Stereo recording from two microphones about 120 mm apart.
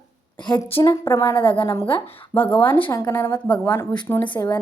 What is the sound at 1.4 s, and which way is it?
Speech, 45° left (ahead or behind).